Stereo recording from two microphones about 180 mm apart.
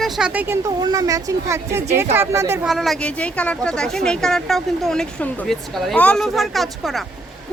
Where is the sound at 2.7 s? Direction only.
Centre (ahead or behind).